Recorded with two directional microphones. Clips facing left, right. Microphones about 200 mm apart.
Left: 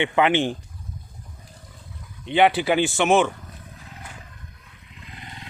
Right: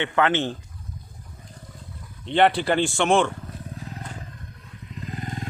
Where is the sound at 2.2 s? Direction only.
5° left (ahead or behind).